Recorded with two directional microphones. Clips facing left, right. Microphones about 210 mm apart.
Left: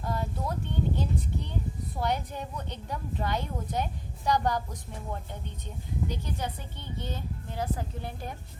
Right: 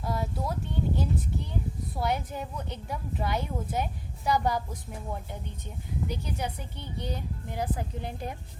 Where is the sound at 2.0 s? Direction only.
5° right (ahead or behind).